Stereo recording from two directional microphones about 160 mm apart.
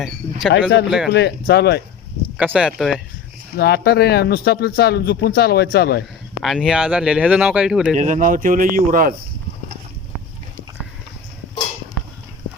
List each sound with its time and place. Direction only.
0.0 s speech: centre (ahead or behind)
1.1 s speech: 90° left
2.4 s speech: 5° right (ahead or behind)
3.6 s speech: 75° left (ahead or behind)
6.4 s speech: centre (ahead or behind)
7.9 s speech: 50° right (ahead or behind)